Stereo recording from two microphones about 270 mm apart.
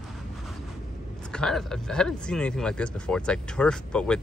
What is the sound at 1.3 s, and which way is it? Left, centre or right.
Speech, centre.